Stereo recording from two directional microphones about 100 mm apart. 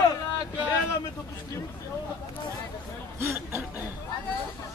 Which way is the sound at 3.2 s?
25° right (ahead or behind).